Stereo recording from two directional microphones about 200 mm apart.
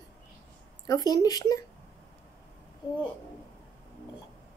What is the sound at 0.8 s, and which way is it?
Speech, 20° left (ahead or behind).